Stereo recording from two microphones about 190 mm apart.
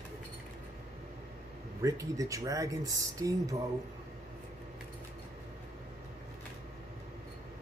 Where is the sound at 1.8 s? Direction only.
15° right (ahead or behind).